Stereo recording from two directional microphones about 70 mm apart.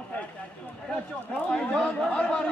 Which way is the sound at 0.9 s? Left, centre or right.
Centre.